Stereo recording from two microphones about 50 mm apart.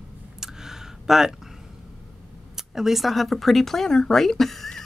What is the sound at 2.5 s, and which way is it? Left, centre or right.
Speech, centre.